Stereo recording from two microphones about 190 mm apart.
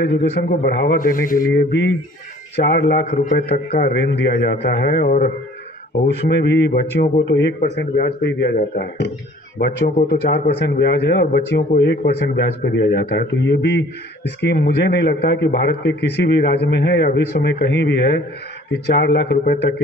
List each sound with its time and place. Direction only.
0.0 s a man's voice: 60° left (ahead or behind)
3.1 s speech: 35° left (ahead or behind)
3.3 s a man's voice: 55° left (ahead or behind)
6.0 s a man's voice: 60° left (ahead or behind)